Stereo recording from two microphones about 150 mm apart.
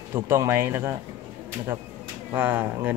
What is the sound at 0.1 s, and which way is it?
Speech, 20° right (ahead or behind).